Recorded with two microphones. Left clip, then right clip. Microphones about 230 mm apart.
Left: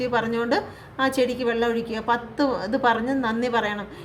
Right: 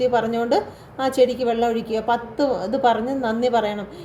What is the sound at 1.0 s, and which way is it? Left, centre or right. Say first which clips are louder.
Speech: right 4 dB; left.